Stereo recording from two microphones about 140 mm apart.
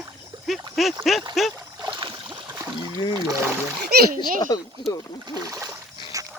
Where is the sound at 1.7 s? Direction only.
30° right (ahead or behind).